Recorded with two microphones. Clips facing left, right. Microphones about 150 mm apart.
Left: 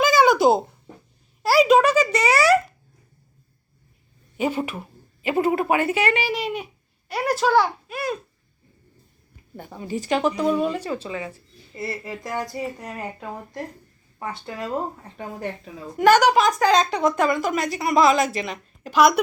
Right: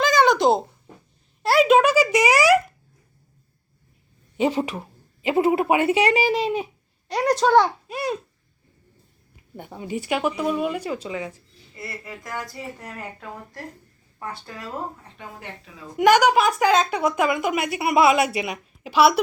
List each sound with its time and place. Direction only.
0.0 s a sound: 5° left (ahead or behind)
1.4 s speech: centre (ahead or behind)
4.4 s speech: 30° right (ahead or behind)
5.2 s speech: 20° right (ahead or behind)
7.1 s a child's voice: 5° left (ahead or behind)
7.9 s speech: 30° right (ahead or behind)
9.6 s speech: 15° right (ahead or behind)
11.8 s speech: 25° left (ahead or behind)
12.8 s speech: 15° left (ahead or behind)
16.0 s speech: 15° right (ahead or behind)